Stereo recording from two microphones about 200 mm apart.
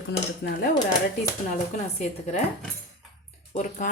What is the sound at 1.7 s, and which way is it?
Speech, 35° left (ahead or behind).